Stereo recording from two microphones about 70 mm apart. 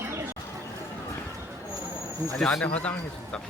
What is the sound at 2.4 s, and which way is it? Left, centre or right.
Speech, centre.